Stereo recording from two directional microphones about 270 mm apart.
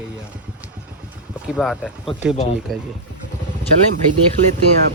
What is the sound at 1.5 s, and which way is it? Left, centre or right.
Speech, centre.